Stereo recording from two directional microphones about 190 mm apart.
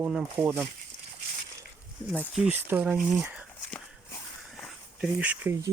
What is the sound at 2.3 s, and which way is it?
Speech, 5° right (ahead or behind).